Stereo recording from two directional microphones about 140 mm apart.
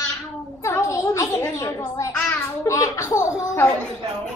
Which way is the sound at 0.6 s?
20° left (ahead or behind).